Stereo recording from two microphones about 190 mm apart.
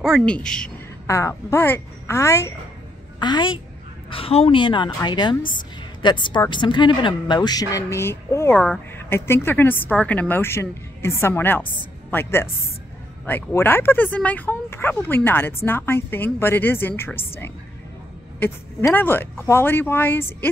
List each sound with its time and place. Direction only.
0.0 s a woman's voice: 5° left (ahead or behind)
1.0 s speech: 15° left (ahead or behind)
18.9 s speech: 10° left (ahead or behind)